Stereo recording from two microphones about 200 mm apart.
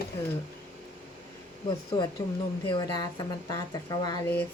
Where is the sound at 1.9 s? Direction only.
25° left (ahead or behind).